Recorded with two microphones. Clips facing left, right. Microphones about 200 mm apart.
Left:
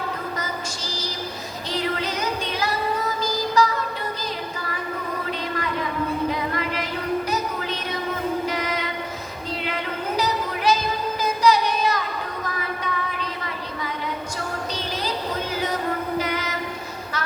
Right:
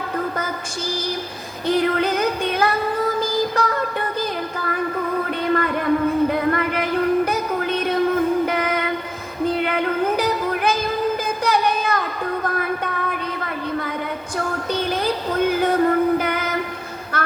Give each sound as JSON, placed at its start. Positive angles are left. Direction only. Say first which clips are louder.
{"t": 1.6, "sound": "music", "louder": "right 8 dB", "side_deg": -55}
{"t": 5.5, "sound": "a sound", "louder": "right 7 dB", "side_deg": -55}
{"t": 7.3, "sound": "music", "louder": "right 4 dB", "side_deg": -55}